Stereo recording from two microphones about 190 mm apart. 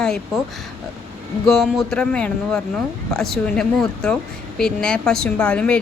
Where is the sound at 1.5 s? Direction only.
Centre (ahead or behind).